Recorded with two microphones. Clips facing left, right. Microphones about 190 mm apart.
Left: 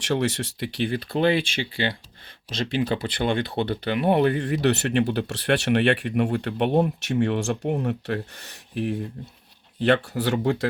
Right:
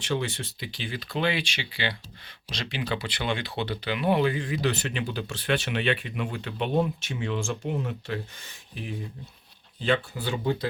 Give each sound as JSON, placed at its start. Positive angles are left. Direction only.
{"t": 0.0, "sound": "speech", "side_deg": 75}